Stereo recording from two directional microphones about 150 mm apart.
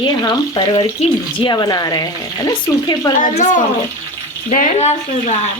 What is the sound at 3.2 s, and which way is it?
Speech, 55° left (ahead or behind).